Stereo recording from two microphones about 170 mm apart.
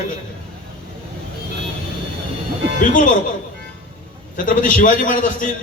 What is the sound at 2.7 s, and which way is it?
Speech, 50° left (ahead or behind).